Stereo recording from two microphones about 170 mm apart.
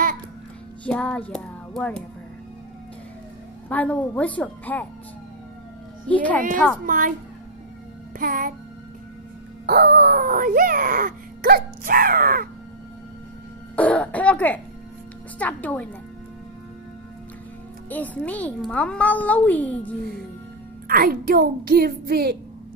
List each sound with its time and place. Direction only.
0.8 s a child's voice: 5° left (ahead or behind)
3.6 s a child's voice: 10° left (ahead or behind)
6.0 s a child's voice: 10° left (ahead or behind)
6.9 s a woman's voice: 55° right (ahead or behind)
8.2 s speech: 55° right (ahead or behind)
9.7 s speech: 70° right (ahead or behind)
13.7 s throat clearing: 10° left (ahead or behind)
15.3 s a child's voice: 10° left (ahead or behind)
17.8 s a child's voice: 10° left (ahead or behind)
20.8 s speech: 60° right (ahead or behind)